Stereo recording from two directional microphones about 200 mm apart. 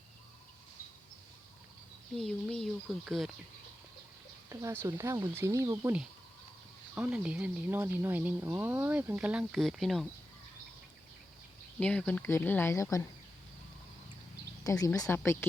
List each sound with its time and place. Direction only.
2.1 s speech: centre (ahead or behind)
4.4 s speech: 15° right (ahead or behind)
11.8 s speech: 5° left (ahead or behind)
14.6 s speech: 15° left (ahead or behind)